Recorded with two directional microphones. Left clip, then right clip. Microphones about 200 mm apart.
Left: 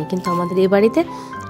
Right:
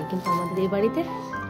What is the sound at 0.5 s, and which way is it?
Speech, 45° left (ahead or behind).